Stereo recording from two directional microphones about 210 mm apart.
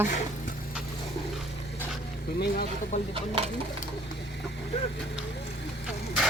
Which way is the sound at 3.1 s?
25° right (ahead or behind).